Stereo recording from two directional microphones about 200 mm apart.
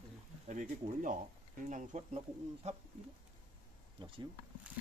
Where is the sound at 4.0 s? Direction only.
25° right (ahead or behind).